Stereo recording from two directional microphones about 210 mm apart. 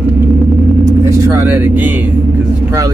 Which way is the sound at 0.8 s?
15° right (ahead or behind).